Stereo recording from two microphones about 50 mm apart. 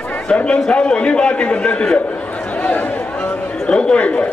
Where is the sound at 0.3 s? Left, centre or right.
Left.